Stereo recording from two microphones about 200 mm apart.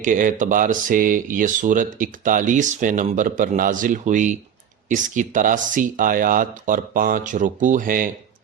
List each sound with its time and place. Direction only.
0.0 s speech: 40° right (ahead or behind)